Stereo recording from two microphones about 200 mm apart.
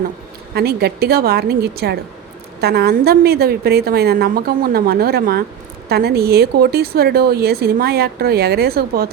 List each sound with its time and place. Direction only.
0.5 s speech: 55° right (ahead or behind)